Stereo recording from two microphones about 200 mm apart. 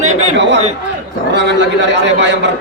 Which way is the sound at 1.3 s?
60° right (ahead or behind).